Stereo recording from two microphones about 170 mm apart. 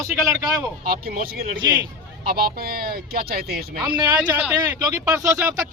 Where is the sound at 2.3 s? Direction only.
60° right (ahead or behind).